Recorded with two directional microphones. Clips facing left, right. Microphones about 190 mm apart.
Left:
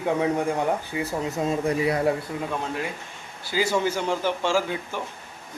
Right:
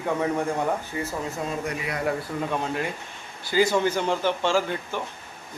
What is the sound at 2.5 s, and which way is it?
Speech, centre (ahead or behind).